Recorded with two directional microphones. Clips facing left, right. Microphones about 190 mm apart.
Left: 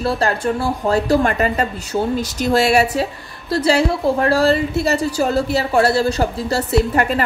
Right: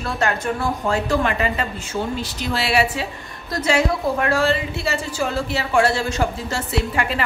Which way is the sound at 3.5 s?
35° left (ahead or behind).